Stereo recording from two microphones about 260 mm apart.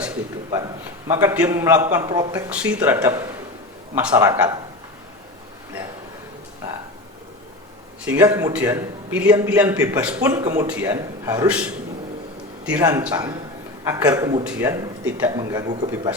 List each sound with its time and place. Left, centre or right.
1.0 s a man's voice: centre
2.5 s a man's voice: centre
8.0 s a man's voice: centre